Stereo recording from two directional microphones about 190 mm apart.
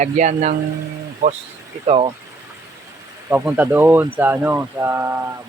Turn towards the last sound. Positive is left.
turn(degrees=-15)  # may be behind; listen again after turning